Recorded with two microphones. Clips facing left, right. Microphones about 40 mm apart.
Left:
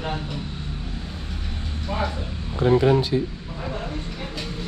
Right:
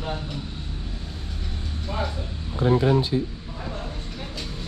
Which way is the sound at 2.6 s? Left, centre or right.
Left.